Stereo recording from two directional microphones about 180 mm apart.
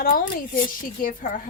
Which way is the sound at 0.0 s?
50° left (ahead or behind).